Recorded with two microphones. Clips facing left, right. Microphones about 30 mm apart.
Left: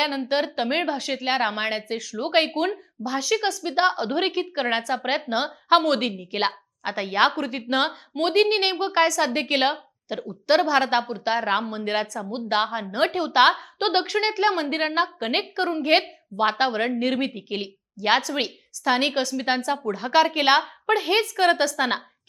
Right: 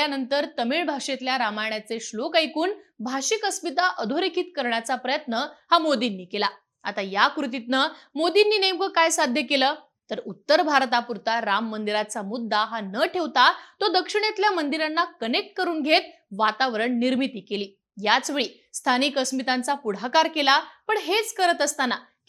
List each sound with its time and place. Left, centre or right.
0.0 s a woman's voice: centre